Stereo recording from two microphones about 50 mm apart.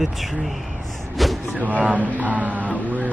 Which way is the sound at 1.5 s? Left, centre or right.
Right.